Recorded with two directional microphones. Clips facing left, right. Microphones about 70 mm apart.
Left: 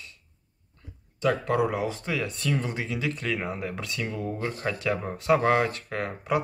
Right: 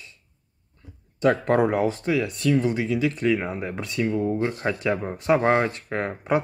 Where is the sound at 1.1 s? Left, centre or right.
Right.